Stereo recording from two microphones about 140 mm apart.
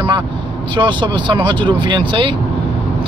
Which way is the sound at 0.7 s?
35° right (ahead or behind).